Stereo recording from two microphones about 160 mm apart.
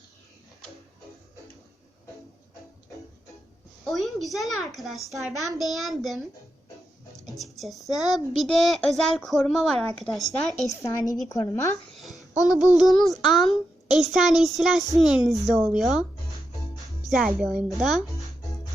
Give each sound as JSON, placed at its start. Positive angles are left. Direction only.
{"t": 3.8, "sound": "a child's voice", "side_deg": 0}
{"t": 7.3, "sound": "a child's voice", "side_deg": 0}
{"t": 10.7, "sound": "a woman's voice", "side_deg": 20}
{"t": 12.7, "sound": "a child's voice", "side_deg": 0}
{"t": 17.1, "sound": "a child's voice", "side_deg": 0}